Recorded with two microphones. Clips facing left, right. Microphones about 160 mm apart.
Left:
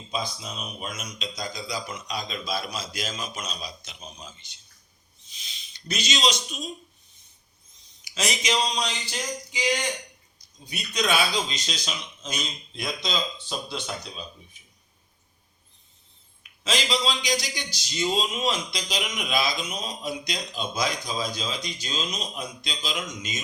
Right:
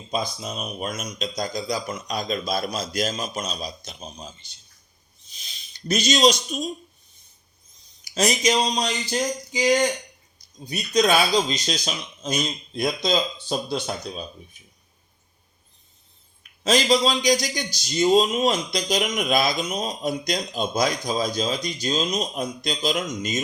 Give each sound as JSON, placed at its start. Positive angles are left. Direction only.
{"t": 0.1, "sound": "a man's voice", "side_deg": -45}
{"t": 8.0, "sound": "speech", "side_deg": -40}
{"t": 16.4, "sound": "a man's voice", "side_deg": -45}